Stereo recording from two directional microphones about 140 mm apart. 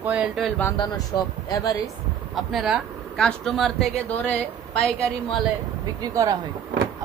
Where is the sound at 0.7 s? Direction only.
30° left (ahead or behind).